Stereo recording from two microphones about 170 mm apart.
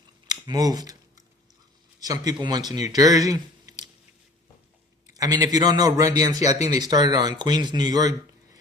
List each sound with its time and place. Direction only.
0.3 s speech: 20° right (ahead or behind)
2.0 s speech: 20° right (ahead or behind)
5.0 s a man's voice: 20° right (ahead or behind)